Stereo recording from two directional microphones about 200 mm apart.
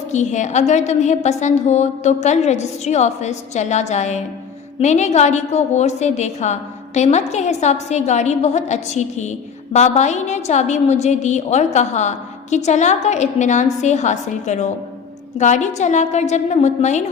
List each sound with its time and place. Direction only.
0.1 s a woman's voice: 35° left (ahead or behind)